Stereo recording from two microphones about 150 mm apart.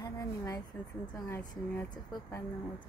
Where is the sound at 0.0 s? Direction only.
25° left (ahead or behind).